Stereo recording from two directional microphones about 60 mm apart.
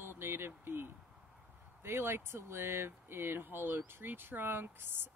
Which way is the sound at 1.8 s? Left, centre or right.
Right.